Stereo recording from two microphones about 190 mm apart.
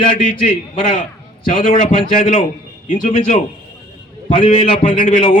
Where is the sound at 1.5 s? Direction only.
45° left (ahead or behind).